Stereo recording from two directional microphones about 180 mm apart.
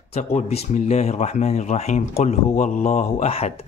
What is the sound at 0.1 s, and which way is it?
Speech, 35° left (ahead or behind).